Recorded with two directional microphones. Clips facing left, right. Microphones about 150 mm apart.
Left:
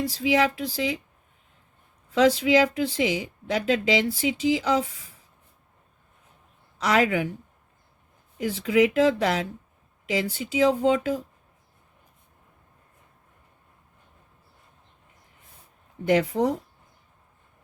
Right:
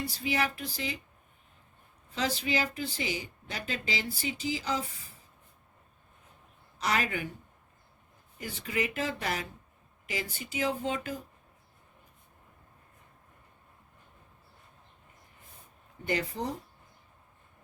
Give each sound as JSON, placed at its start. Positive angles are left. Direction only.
{"t": 0.2, "sound": "speech", "side_deg": 90}
{"t": 2.1, "sound": "speech", "side_deg": 90}
{"t": 6.7, "sound": "speech", "side_deg": 90}
{"t": 8.4, "sound": "speech", "side_deg": 90}
{"t": 16.0, "sound": "speech", "side_deg": 90}